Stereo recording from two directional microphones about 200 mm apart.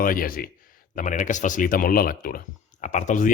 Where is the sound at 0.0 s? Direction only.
45° left (ahead or behind).